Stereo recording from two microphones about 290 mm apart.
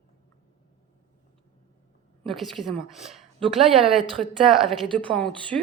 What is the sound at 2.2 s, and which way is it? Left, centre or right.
A woman's voice, centre.